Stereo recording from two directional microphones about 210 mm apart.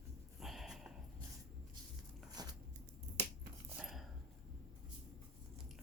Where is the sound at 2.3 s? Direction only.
20° right (ahead or behind).